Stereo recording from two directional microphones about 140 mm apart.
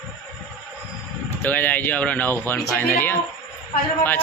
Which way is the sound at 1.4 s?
10° left (ahead or behind).